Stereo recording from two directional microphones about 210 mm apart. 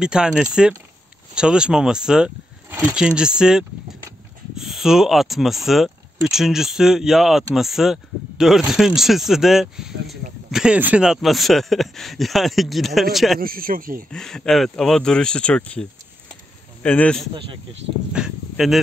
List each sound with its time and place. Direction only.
0.0 s speech: 5° right (ahead or behind)
13.4 s speech: 45° right (ahead or behind)
14.1 s speech: 5° left (ahead or behind)